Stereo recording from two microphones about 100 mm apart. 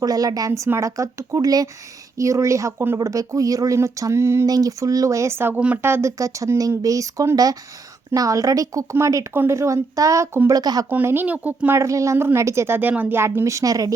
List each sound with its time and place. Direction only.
0.0 s speech: 40° right (ahead or behind)
4.4 s speech: 40° right (ahead or behind)
10.6 s speech: 40° right (ahead or behind)
10.8 s a woman's voice: 20° right (ahead or behind)
11.8 s a woman's voice: 30° right (ahead or behind)